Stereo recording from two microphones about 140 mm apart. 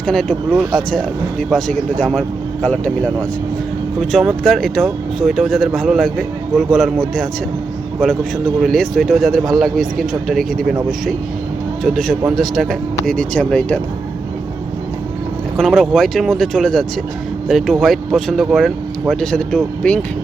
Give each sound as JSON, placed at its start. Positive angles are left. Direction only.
{"t": 0.0, "sound": "speech", "side_deg": 5}
{"t": 8.0, "sound": "speech", "side_deg": 0}
{"t": 11.8, "sound": "speech", "side_deg": 0}
{"t": 15.5, "sound": "speech", "side_deg": 0}